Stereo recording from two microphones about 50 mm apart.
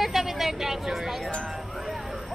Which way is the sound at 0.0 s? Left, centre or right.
Centre.